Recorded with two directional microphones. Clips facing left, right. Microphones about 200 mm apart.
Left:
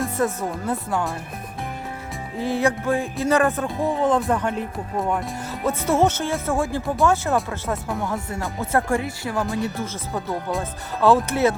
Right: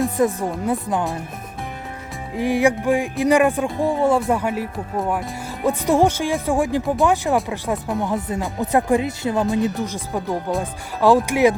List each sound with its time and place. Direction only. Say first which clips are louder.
0.3 s speech: right 3 dB; 15° right (ahead or behind)
2.4 s speech: right 4 dB; 15° right (ahead or behind)